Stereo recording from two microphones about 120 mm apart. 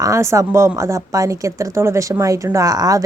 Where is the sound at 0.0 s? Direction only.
25° right (ahead or behind).